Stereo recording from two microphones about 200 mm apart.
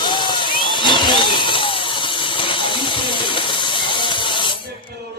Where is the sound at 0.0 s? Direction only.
25° left (ahead or behind).